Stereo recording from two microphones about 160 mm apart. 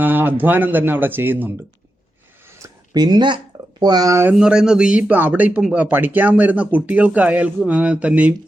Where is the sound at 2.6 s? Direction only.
25° right (ahead or behind).